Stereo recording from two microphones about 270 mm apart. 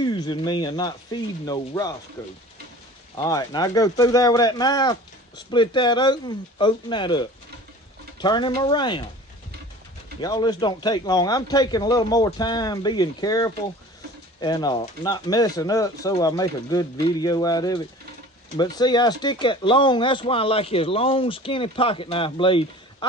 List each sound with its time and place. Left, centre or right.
0.0 s speech: centre
3.2 s speech: centre
10.2 s speech: centre